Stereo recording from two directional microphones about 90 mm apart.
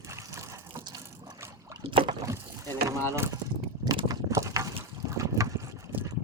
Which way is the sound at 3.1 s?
30° right (ahead or behind).